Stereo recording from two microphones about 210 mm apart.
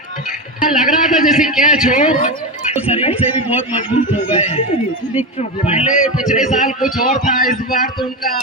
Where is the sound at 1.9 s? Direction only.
35° left (ahead or behind).